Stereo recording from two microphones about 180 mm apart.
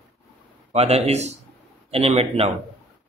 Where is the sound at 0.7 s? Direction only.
35° right (ahead or behind).